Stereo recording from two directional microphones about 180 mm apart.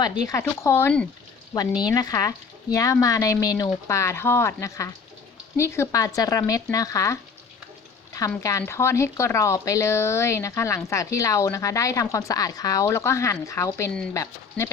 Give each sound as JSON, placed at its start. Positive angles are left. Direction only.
{"t": 0.0, "sound": "speech", "side_deg": 20}
{"t": 8.4, "sound": "speech", "side_deg": 15}